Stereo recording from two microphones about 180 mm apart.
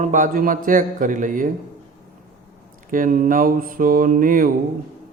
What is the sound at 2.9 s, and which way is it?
A man's voice, 50° right (ahead or behind).